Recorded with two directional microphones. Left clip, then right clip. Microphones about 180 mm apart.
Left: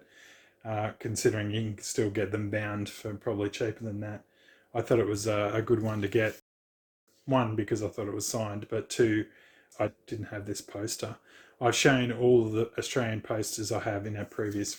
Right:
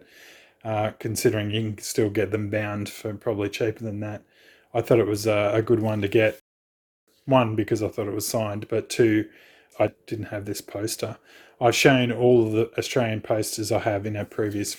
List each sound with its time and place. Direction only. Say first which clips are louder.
0.2 s speech: right 8 dB; 40° right (ahead or behind)